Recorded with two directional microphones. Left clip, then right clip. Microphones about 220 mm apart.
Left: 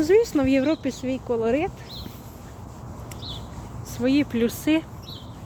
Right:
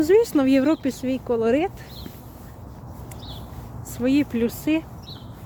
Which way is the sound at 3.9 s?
10° right (ahead or behind).